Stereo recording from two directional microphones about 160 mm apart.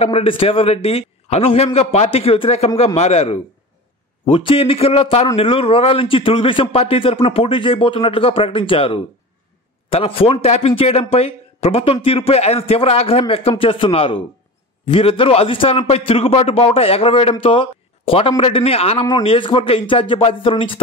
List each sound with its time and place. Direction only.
0.0 s a man's voice: 40° left (ahead or behind)